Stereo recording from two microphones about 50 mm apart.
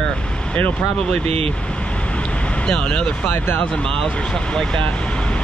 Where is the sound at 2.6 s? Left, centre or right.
Centre.